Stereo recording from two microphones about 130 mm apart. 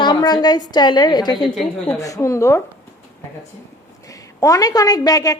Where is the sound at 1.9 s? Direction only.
25° left (ahead or behind).